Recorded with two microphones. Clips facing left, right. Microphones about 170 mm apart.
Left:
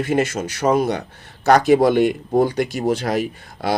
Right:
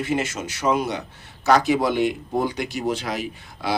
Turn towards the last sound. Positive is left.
turn(degrees=45)  # may be behind; listen again after turning